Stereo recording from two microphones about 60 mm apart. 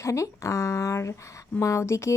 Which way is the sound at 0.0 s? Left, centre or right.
Left.